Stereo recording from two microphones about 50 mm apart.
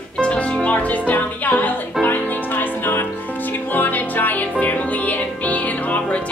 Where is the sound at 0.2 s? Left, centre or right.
Left.